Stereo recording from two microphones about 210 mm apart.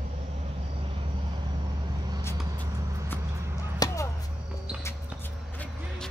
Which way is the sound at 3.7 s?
15° left (ahead or behind).